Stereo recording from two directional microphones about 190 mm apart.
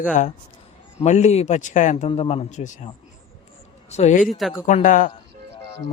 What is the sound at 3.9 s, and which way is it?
Speech, 35° left (ahead or behind).